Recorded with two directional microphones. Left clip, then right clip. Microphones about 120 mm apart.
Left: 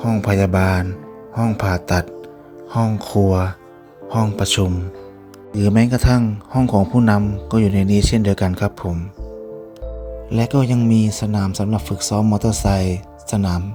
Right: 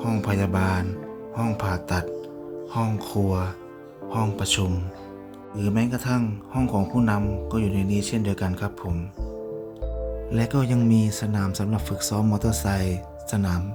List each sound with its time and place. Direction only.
0.0 s a sound: 40° left (ahead or behind)
2.7 s speech: 35° left (ahead or behind)
3.0 s a sound: 50° left (ahead or behind)
4.6 s speech: 30° left (ahead or behind)
5.5 s speech: 60° left (ahead or behind)
6.2 s speech: 35° left (ahead or behind)
6.7 s a sound: 45° left (ahead or behind)
7.2 s speech: 40° left (ahead or behind)
7.5 s speech: 60° left (ahead or behind)
10.2 s speech: 40° left (ahead or behind)